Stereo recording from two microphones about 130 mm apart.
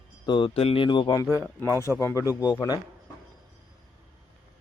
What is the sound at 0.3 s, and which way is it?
Speech, 40° left (ahead or behind).